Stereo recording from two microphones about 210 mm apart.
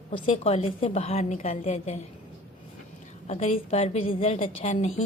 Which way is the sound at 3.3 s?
30° left (ahead or behind).